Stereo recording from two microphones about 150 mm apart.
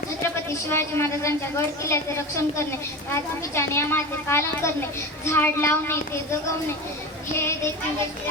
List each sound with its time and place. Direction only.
0.7 s a woman's voice: 15° left (ahead or behind)
7.3 s a woman's voice: 15° left (ahead or behind)